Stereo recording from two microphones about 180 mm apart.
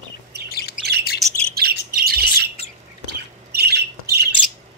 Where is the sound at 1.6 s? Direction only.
60° right (ahead or behind).